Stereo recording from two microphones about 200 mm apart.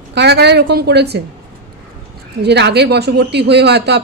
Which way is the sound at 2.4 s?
55° right (ahead or behind).